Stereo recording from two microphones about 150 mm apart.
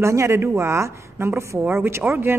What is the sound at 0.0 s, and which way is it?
A woman's voice, 20° right (ahead or behind).